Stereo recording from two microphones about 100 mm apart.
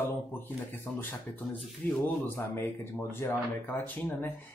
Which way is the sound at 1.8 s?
15° left (ahead or behind).